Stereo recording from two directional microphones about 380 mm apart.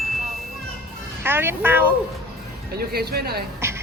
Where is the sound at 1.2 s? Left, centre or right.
Centre.